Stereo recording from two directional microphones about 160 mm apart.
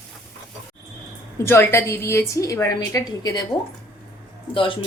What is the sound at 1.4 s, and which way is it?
A woman's voice, 15° left (ahead or behind).